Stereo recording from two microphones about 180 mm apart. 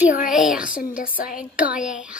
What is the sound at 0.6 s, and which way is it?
Speech, 50° left (ahead or behind).